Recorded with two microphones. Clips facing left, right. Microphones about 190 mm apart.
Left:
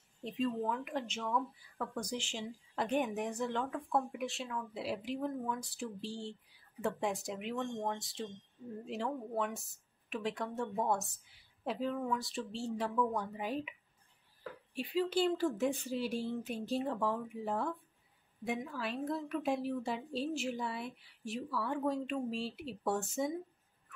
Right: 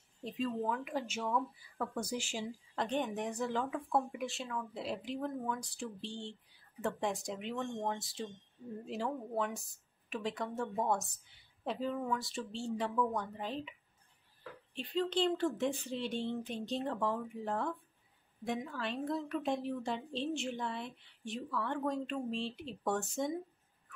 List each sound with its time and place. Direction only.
0.2 s a woman's voice: centre (ahead or behind)
2.7 s a woman's voice: 5° left (ahead or behind)